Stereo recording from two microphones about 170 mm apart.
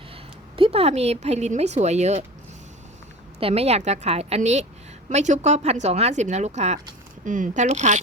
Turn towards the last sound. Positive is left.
turn(degrees=-45)  # may be behind; listen again after turning